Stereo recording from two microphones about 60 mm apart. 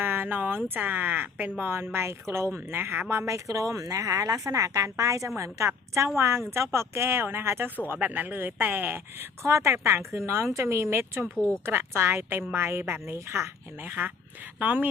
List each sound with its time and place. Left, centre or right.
0.0 s speech: right
3.2 s a woman's voice: right
7.9 s speech: right
9.4 s speech: right
11.3 s a woman's voice: left
11.6 s speech: right
13.8 s speech: right